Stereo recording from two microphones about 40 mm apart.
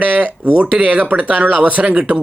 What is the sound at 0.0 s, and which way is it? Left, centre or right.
A man's voice, right.